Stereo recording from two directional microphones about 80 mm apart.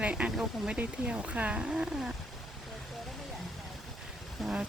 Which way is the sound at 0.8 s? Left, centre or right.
Centre.